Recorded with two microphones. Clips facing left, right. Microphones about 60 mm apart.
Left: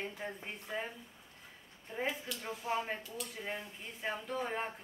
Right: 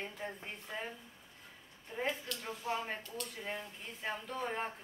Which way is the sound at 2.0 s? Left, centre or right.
Centre.